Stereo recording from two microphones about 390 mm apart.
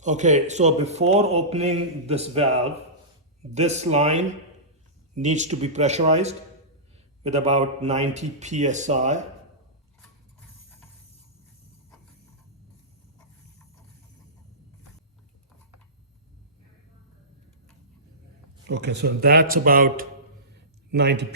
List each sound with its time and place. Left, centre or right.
0.0 s speech: centre
18.6 s speech: right